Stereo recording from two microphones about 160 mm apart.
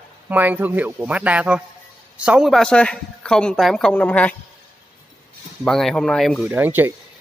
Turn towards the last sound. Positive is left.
turn(degrees=-10)  # may be behind; listen again after turning